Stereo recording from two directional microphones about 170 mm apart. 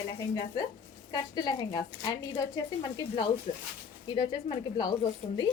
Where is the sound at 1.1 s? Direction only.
25° left (ahead or behind).